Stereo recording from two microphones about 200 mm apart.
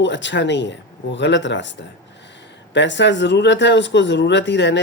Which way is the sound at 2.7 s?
60° left (ahead or behind).